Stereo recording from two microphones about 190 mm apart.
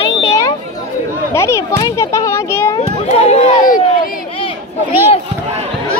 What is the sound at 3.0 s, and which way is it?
Speech, 35° left (ahead or behind).